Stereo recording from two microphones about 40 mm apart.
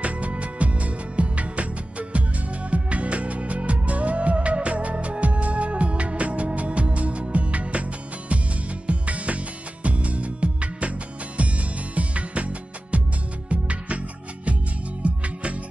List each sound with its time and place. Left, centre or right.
0.0 s music: right